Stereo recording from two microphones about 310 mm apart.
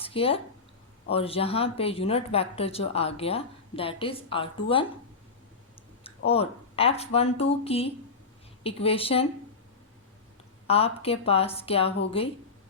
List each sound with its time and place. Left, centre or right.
0.0 s speech: centre
6.0 s a woman's voice: centre
10.7 s a woman's voice: centre